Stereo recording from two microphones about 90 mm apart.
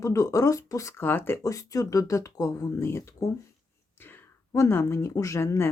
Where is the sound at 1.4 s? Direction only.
40° left (ahead or behind).